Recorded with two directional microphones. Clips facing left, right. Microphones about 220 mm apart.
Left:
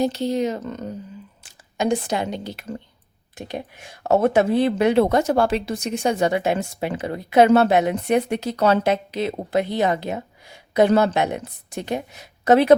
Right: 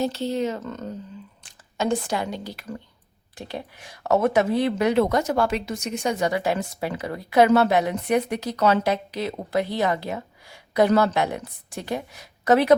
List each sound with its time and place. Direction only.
0.0 s speech: 15° left (ahead or behind)